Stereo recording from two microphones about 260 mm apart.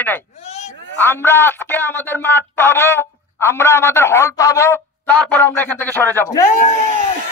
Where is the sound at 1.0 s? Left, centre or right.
Centre.